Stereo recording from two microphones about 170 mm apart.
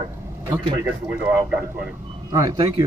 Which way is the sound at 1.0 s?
10° right (ahead or behind).